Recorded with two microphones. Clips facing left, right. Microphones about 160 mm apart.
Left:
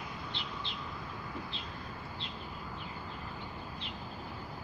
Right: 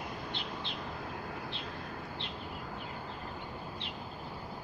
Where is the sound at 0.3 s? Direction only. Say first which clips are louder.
Right 2 dB; 50° right (ahead or behind).